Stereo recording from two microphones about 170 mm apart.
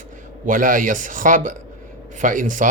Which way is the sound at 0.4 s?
50° right (ahead or behind).